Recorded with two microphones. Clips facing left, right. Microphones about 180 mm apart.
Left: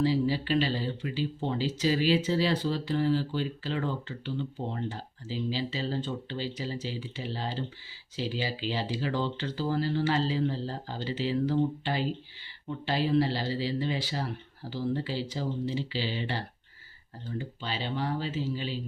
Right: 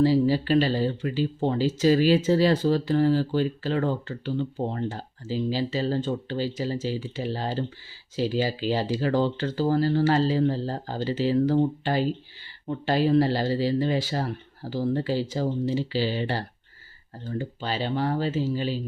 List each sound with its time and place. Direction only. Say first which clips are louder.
0.0 s speech: right 6 dB; 45° right (ahead or behind)